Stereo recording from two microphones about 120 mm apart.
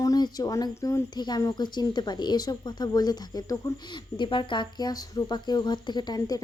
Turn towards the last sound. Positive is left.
turn(degrees=35)  # may be behind; listen again after turning